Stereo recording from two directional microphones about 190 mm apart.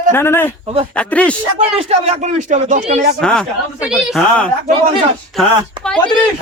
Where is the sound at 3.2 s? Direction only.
5° left (ahead or behind).